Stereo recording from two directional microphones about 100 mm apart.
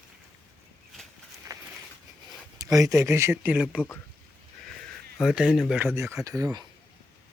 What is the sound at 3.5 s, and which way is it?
Speech, 10° right (ahead or behind).